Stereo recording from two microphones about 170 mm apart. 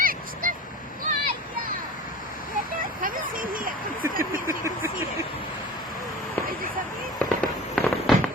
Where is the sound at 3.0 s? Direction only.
55° right (ahead or behind).